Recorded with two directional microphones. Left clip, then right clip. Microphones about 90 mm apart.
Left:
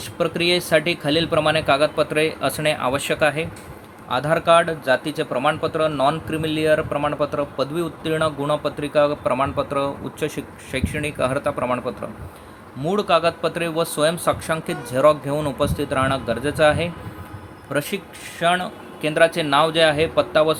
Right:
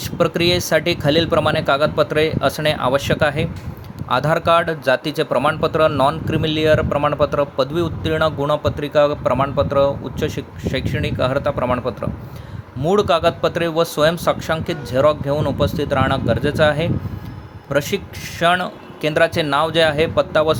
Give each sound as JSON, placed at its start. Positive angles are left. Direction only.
{"t": 0.0, "sound": "speech", "side_deg": -60}
{"t": 4.1, "sound": "speech", "side_deg": -80}
{"t": 12.8, "sound": "speech", "side_deg": -65}
{"t": 17.9, "sound": "speech", "side_deg": -85}